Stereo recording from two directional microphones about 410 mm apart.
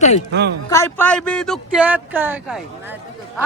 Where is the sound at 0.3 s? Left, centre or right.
Right.